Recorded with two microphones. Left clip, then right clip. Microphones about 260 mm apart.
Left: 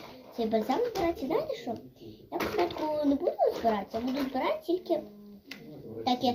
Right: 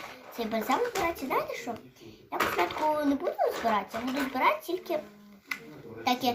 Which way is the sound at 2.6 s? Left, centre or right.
Right.